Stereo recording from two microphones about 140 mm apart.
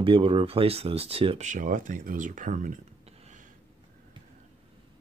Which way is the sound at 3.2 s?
60° right (ahead or behind).